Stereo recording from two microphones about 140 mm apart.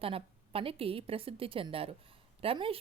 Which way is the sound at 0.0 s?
40° right (ahead or behind).